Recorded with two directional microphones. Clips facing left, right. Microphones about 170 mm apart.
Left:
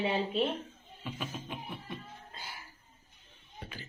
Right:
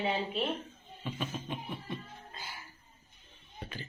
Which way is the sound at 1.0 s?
5° left (ahead or behind).